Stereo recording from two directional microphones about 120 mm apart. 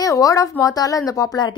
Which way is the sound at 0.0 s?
30° left (ahead or behind).